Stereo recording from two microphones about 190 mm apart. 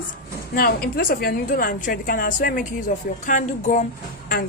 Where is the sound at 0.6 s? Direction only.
50° left (ahead or behind).